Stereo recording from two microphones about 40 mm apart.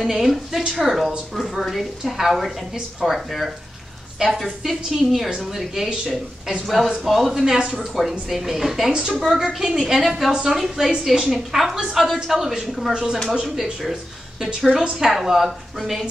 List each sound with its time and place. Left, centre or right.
0.0 s a woman's voice: centre
14.7 s a woman's voice: centre